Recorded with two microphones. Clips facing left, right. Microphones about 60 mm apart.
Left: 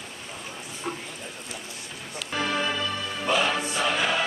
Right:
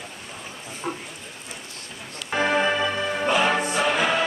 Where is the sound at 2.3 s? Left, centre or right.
Right.